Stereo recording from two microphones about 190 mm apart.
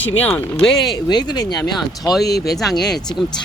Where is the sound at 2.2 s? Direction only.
60° left (ahead or behind).